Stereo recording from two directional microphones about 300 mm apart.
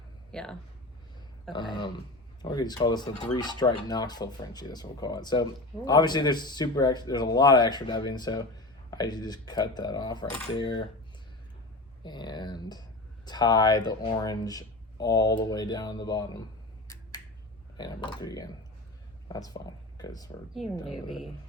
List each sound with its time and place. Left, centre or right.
0.3 s speech: centre
1.5 s speech: centre
12.0 s speech: centre
17.7 s speech: centre